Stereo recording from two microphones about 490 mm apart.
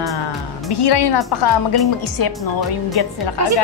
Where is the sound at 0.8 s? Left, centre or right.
Left.